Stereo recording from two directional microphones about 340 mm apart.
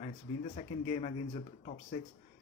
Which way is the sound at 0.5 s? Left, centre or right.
Centre.